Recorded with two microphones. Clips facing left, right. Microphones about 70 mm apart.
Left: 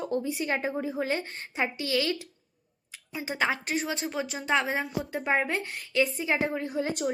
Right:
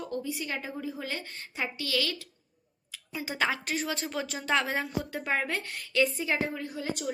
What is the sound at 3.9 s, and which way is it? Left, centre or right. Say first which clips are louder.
Speech: left 2 dB; left.